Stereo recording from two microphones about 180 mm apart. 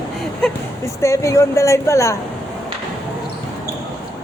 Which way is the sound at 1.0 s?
15° left (ahead or behind).